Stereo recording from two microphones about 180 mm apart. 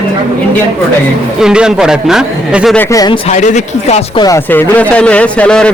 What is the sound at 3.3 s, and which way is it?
Speech, 40° left (ahead or behind).